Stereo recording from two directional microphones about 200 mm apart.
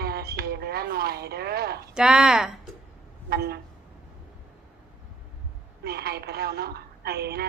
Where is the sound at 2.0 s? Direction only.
5° right (ahead or behind).